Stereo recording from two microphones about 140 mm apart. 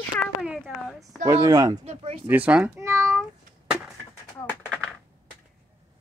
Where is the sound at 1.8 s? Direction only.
45° right (ahead or behind).